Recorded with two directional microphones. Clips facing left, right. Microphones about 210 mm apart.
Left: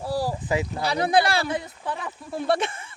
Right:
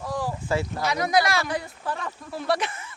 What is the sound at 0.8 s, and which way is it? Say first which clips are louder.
Speech: left 2 dB; 30° left (ahead or behind).